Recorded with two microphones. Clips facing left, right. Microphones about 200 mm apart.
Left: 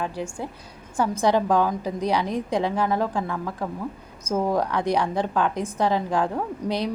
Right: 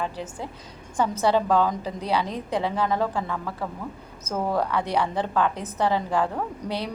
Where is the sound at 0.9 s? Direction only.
10° left (ahead or behind).